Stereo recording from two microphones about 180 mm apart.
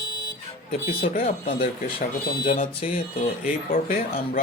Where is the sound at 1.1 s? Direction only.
45° left (ahead or behind).